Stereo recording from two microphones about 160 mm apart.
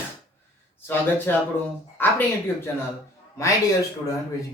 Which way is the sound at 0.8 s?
15° left (ahead or behind).